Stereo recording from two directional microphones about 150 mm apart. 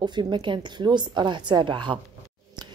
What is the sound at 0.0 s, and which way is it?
A woman's voice, 30° right (ahead or behind).